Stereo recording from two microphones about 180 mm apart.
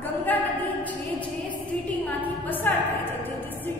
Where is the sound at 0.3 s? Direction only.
10° left (ahead or behind).